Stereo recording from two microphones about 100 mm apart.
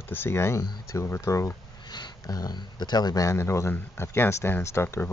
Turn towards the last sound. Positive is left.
turn(degrees=25)  # may be behind; listen again after turning